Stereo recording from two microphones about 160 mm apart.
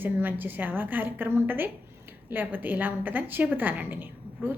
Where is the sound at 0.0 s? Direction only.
10° right (ahead or behind).